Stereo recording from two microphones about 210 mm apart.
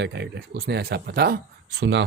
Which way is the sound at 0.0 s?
55° right (ahead or behind).